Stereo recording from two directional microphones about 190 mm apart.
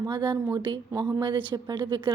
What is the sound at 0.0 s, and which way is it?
A woman's voice, 20° right (ahead or behind).